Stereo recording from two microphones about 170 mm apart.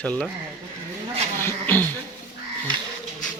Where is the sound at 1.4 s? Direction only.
15° left (ahead or behind).